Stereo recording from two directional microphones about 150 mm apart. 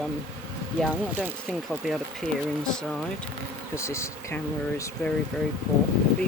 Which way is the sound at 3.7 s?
20° left (ahead or behind).